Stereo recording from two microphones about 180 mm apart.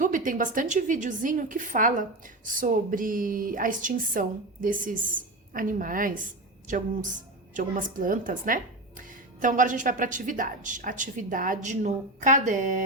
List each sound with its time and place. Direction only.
0.0 s a woman's voice: 45° right (ahead or behind)